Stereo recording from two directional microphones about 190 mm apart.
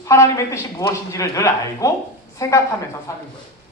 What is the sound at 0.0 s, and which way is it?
A man's voice, 15° left (ahead or behind).